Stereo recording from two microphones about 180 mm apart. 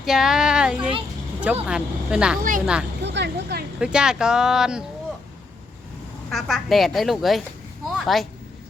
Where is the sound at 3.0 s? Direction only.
75° right (ahead or behind).